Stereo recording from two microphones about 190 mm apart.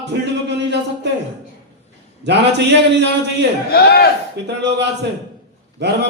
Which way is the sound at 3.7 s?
55° left (ahead or behind).